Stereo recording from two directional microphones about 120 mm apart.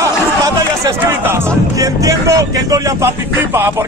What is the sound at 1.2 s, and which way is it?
Speech, 20° right (ahead or behind).